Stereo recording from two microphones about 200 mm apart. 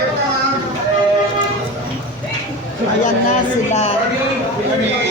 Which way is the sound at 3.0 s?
35° left (ahead or behind).